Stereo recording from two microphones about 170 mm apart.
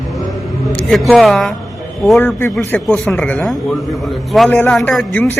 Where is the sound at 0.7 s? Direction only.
Centre (ahead or behind).